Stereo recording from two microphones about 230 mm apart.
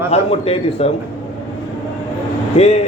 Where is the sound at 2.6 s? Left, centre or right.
Left.